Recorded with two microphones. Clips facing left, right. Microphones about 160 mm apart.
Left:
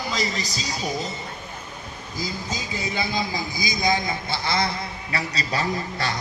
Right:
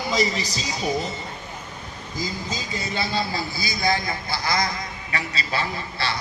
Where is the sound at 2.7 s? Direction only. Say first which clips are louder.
Even; 15° left (ahead or behind).